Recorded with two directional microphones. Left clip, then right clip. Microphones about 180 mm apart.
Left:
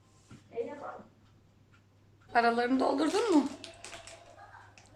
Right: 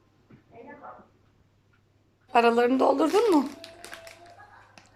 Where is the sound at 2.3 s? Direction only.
10° right (ahead or behind).